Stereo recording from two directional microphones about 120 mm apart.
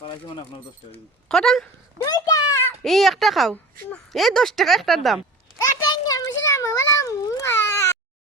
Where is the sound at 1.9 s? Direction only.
30° left (ahead or behind).